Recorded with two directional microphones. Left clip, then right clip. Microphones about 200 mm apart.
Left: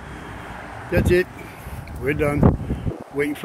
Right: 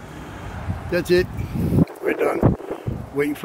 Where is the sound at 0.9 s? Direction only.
5° right (ahead or behind).